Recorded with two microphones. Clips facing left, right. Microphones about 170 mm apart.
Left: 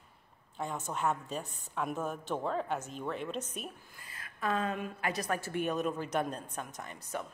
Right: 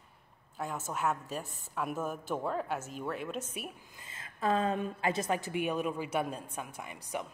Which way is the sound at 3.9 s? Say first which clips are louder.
Right 2 dB; 25° right (ahead or behind).